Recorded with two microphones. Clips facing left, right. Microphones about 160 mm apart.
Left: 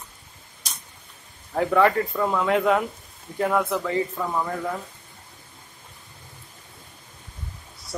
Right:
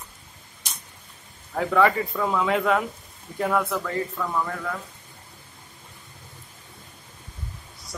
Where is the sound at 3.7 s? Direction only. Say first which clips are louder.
Left 3 dB; 20° left (ahead or behind).